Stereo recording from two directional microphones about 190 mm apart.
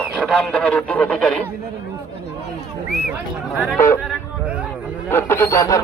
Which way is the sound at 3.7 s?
15° left (ahead or behind).